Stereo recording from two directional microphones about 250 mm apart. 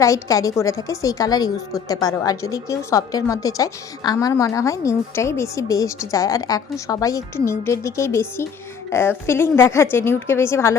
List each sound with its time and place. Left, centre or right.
0.0 s a woman's voice: centre